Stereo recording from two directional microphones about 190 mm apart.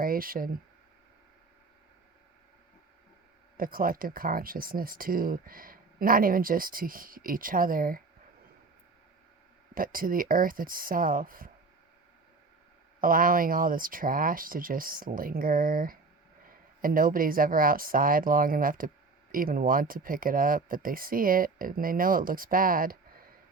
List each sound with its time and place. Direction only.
0.0 s speech: 50° right (ahead or behind)
3.6 s speech: 50° right (ahead or behind)
9.7 s speech: 50° right (ahead or behind)
13.0 s speech: 45° right (ahead or behind)